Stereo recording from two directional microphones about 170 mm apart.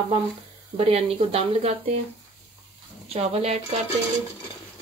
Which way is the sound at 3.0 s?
35° right (ahead or behind).